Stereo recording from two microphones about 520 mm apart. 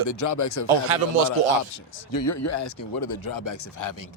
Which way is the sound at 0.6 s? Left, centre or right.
Right.